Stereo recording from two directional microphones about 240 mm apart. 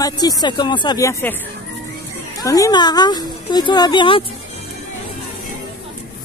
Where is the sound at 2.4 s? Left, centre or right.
Centre.